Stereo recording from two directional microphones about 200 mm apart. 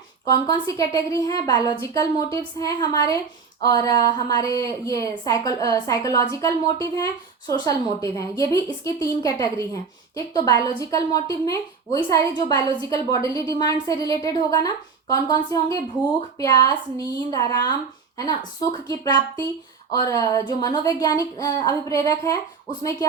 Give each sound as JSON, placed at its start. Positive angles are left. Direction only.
{"t": 0.3, "sound": "a woman's voice", "side_deg": 20}
{"t": 18.9, "sound": "a woman's voice", "side_deg": 20}